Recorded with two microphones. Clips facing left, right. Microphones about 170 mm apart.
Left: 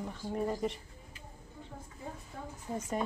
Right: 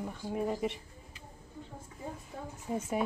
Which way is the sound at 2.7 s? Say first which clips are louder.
Right 3 dB; 10° right (ahead or behind).